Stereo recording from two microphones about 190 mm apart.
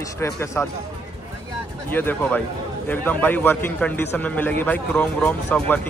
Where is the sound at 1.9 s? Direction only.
10° left (ahead or behind).